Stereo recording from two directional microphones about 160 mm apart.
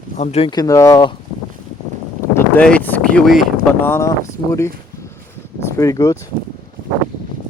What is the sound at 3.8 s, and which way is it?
Speech, 15° left (ahead or behind).